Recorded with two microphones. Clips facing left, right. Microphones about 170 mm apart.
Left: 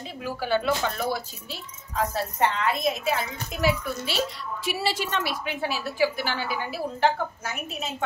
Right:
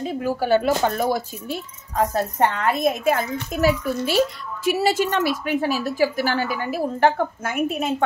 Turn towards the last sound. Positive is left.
turn(degrees=-55)  # may be behind; listen again after turning